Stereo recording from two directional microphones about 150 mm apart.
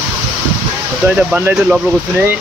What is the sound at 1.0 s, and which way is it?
Speech, 10° right (ahead or behind).